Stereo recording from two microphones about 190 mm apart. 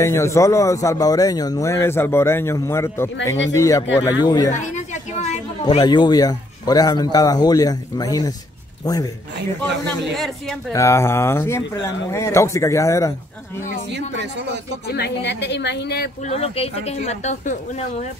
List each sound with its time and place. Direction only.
0.0 s a man's voice: 15° left (ahead or behind)
4.5 s chatter: 40° left (ahead or behind)
5.8 s a man's voice: 20° left (ahead or behind)
10.1 s speech: centre (ahead or behind)
10.7 s speech: 15° left (ahead or behind)
13.9 s speech: 65° right (ahead or behind)
14.9 s a woman's voice: 60° left (ahead or behind)
16.3 s speech: 30° left (ahead or behind)